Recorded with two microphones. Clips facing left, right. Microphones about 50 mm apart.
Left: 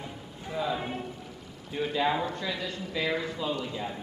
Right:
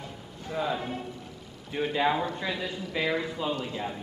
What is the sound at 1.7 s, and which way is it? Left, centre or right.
A man's voice, right.